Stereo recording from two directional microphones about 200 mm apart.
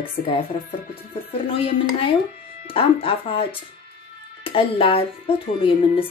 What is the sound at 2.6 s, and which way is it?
Speech, 25° left (ahead or behind).